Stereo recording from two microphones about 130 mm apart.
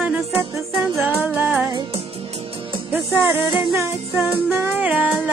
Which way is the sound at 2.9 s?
15° right (ahead or behind).